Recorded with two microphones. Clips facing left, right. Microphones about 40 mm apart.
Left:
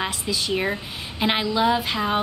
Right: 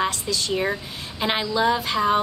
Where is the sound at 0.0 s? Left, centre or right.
Centre.